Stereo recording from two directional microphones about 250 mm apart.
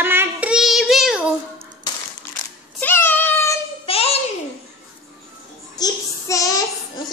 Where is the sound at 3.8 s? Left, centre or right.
Left.